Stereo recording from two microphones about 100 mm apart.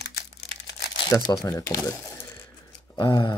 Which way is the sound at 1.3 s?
40° left (ahead or behind).